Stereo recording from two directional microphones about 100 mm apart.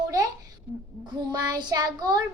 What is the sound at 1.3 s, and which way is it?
Child singing, 45° right (ahead or behind).